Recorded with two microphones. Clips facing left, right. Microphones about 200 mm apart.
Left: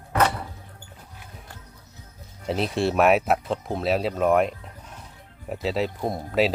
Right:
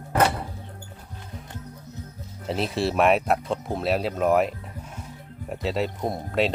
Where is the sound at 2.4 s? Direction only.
Centre (ahead or behind).